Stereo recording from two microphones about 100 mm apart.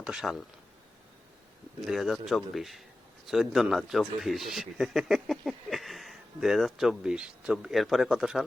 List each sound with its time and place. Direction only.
0.0 s speech: 5° right (ahead or behind)
1.8 s speech: centre (ahead or behind)